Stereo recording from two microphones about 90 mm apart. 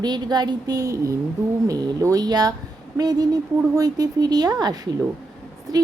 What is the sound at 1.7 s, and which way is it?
Speech, 50° right (ahead or behind).